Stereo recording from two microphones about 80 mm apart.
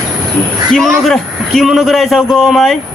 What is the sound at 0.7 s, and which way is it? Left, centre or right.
A man's voice, centre.